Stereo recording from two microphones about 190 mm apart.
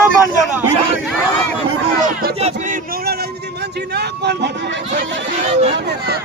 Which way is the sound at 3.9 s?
60° right (ahead or behind).